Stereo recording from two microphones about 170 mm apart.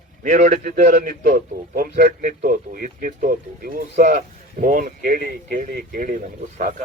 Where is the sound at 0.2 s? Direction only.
50° right (ahead or behind).